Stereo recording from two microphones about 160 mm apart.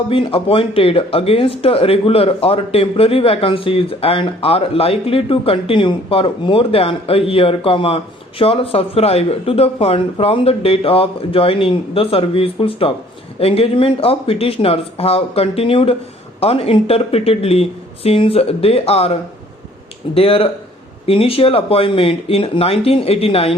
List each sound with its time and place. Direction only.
0.1 s speech: 35° left (ahead or behind)
20.1 s speech: 35° left (ahead or behind)